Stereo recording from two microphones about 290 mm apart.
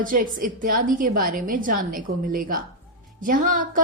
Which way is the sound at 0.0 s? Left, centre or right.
Right.